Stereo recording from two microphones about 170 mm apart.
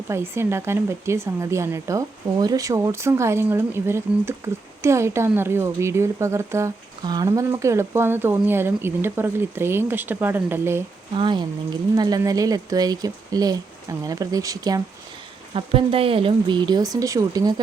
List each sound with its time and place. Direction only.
0.1 s speech: 15° right (ahead or behind)
11.1 s speech: 30° right (ahead or behind)
15.5 s speech: 35° right (ahead or behind)